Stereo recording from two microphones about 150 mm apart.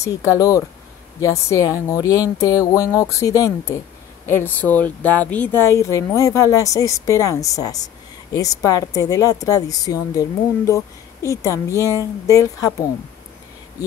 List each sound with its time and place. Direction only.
0.0 s speech: 20° left (ahead or behind)